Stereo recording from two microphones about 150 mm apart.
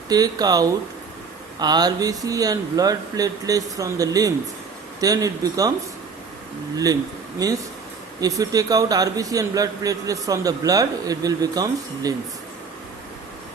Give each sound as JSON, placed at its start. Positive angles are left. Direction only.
{"t": 0.1, "sound": "a man's voice", "side_deg": -25}
{"t": 7.4, "sound": "a man's voice", "side_deg": -25}